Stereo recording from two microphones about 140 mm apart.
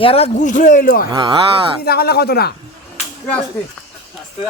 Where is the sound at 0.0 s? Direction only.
45° left (ahead or behind).